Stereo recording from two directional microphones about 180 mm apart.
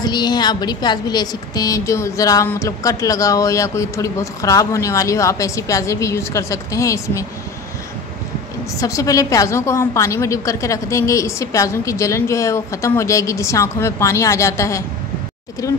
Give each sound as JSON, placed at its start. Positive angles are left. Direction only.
{"t": 0.0, "sound": "a woman's voice", "side_deg": 25}
{"t": 8.7, "sound": "a woman's voice", "side_deg": 20}